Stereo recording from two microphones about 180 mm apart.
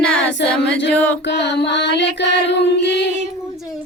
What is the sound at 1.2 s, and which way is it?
Music, 75° left (ahead or behind).